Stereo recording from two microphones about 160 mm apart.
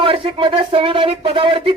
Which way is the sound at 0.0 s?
35° right (ahead or behind).